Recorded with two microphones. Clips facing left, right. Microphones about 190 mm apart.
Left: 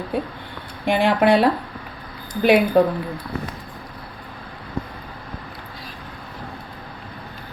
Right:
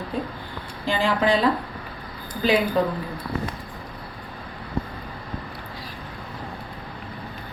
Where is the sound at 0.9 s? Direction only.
65° left (ahead or behind).